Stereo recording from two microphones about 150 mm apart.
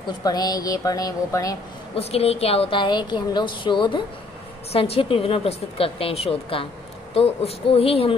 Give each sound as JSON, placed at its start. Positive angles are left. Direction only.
{"t": 0.0, "sound": "speech", "side_deg": 25}
{"t": 2.0, "sound": "a woman's voice", "side_deg": 40}